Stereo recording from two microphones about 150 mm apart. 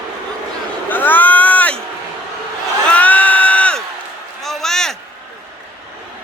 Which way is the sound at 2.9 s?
10° left (ahead or behind).